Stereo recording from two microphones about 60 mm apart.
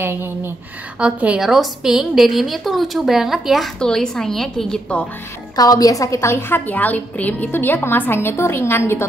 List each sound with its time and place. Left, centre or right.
0.0 s speech: right
0.9 s a woman's voice: centre
1.4 s a woman's voice: centre
3.8 s a woman's voice: centre
5.6 s a woman's voice: left
6.5 s a woman's voice: left